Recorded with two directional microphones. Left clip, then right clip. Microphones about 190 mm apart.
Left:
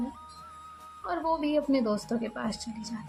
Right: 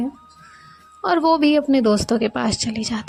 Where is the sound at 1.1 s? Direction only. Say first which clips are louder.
Right 13 dB; 45° right (ahead or behind).